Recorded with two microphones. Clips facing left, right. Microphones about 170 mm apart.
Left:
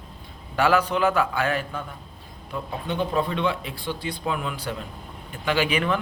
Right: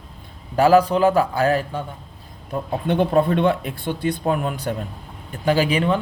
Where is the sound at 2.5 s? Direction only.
50° right (ahead or behind).